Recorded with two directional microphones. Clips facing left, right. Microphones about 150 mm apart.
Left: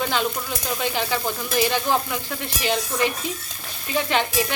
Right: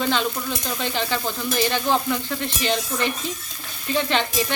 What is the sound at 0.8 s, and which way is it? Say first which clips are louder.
Speech: left 1 dB; 10° left (ahead or behind).